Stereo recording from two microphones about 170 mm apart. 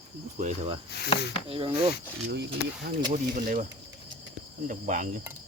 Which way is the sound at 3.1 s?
50° right (ahead or behind).